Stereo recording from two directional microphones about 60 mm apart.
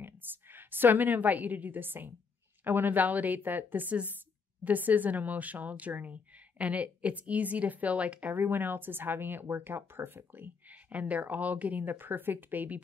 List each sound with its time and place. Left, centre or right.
0.0 s a woman's voice: right